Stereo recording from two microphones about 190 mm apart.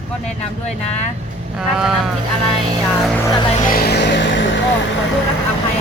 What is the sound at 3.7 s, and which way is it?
Vehicle, 55° left (ahead or behind).